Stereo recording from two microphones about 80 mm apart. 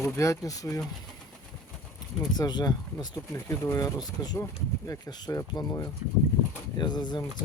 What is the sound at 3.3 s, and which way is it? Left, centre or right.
Speech, left.